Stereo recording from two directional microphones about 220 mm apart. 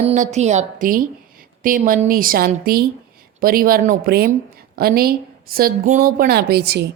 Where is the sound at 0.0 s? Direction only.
30° right (ahead or behind).